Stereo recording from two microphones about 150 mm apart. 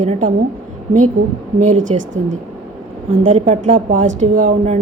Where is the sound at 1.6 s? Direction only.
55° right (ahead or behind).